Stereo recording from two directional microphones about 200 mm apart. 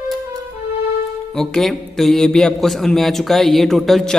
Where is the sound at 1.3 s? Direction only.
Centre (ahead or behind).